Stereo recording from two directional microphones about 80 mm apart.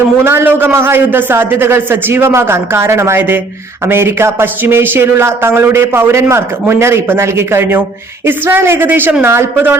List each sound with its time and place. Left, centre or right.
0.3 s a man's voice: right